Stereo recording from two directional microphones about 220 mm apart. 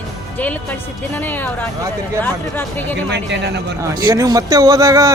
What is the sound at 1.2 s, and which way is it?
Speech, 10° left (ahead or behind).